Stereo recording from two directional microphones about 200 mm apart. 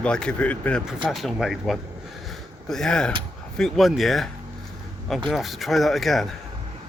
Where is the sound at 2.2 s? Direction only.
Centre (ahead or behind).